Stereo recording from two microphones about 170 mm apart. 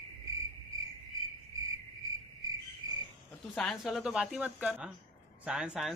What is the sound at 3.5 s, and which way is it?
A man's voice, 5° left (ahead or behind).